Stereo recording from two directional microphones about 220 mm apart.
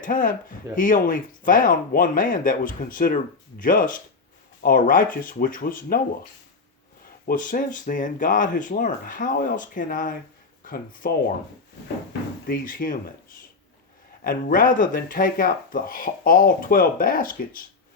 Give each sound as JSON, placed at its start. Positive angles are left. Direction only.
{"t": 0.0, "sound": "speech", "side_deg": 40}
{"t": 7.3, "sound": "speech", "side_deg": 40}
{"t": 12.5, "sound": "speech", "side_deg": 40}
{"t": 14.3, "sound": "speech", "side_deg": 40}